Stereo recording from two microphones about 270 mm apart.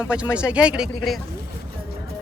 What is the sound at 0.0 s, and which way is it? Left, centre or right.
Speech, centre.